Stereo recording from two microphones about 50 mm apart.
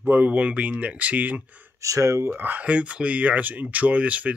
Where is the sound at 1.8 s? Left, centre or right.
Right.